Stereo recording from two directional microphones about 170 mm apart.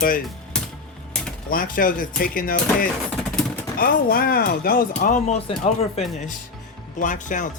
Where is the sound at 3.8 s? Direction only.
60° left (ahead or behind).